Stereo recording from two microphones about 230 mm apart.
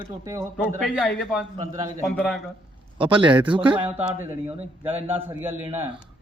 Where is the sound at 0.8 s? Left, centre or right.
Centre.